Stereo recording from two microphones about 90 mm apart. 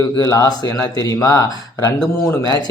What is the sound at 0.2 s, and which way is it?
Speech, 40° left (ahead or behind).